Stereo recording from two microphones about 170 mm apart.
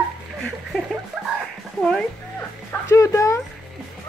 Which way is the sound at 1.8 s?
5° left (ahead or behind).